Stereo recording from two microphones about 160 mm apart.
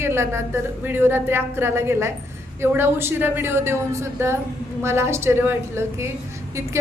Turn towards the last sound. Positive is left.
turn(degrees=-15)  # may be behind; listen again after turning